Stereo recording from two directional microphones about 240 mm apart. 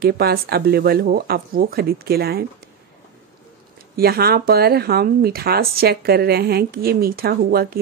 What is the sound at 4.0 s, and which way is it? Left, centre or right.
A woman's voice, right.